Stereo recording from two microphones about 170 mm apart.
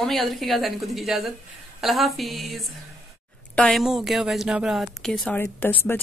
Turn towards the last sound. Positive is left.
turn(degrees=10)  # may be behind; listen again after turning